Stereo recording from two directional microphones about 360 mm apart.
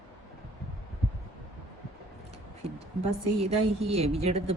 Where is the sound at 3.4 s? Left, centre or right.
Centre.